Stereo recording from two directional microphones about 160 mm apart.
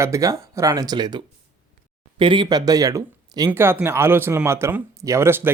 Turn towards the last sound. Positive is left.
turn(degrees=-15)  # may be behind; listen again after turning